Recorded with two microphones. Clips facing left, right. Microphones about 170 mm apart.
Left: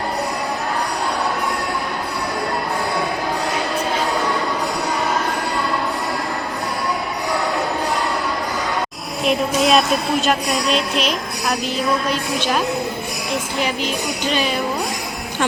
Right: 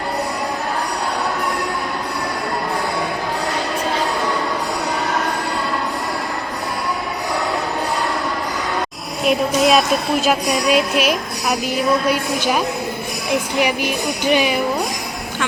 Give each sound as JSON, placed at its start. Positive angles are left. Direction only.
{"t": 9.2, "sound": "a woman's voice", "side_deg": -5}